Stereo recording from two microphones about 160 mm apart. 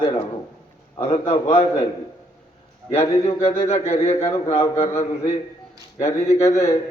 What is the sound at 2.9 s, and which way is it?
Speech, 40° left (ahead or behind).